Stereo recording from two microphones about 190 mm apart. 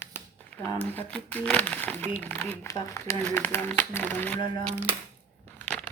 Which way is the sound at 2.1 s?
10° left (ahead or behind).